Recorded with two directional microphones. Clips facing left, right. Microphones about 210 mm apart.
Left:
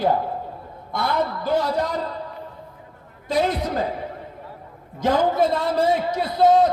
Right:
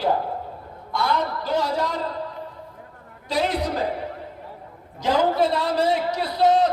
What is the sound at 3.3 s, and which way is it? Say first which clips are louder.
Speech: left 2 dB; 50° left (ahead or behind).